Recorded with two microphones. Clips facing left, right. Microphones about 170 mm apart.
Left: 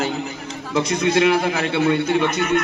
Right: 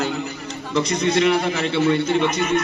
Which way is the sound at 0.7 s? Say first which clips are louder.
Left 1 dB; 55° left (ahead or behind).